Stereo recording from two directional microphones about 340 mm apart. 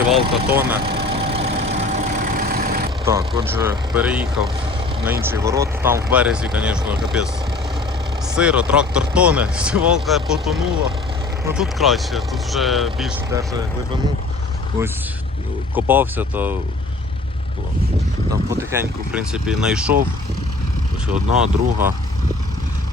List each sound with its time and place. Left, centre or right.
0.2 s speech: centre
0.9 s vehicle: centre
3.0 s speech: centre
8.3 s speech: centre
15.7 s speech: centre
18.5 s speech: centre
21.1 s speech: centre